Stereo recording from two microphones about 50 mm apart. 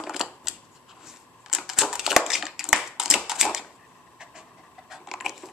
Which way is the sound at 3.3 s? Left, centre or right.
Centre.